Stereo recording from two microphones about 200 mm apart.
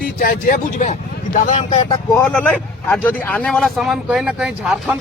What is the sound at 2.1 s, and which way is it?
Speech, 10° left (ahead or behind).